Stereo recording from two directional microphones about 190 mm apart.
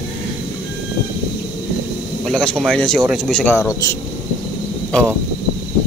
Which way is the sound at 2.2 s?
5° left (ahead or behind).